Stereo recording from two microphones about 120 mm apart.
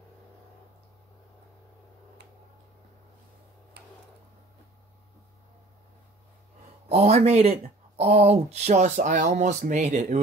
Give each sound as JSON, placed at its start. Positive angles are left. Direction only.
{"t": 6.9, "sound": "speech", "side_deg": -60}